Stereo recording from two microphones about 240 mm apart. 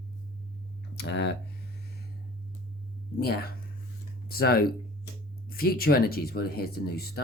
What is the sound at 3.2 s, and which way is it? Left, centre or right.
Speech, left.